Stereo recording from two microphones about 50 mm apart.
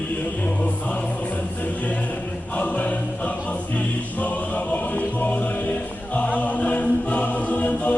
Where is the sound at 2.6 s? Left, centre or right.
Left.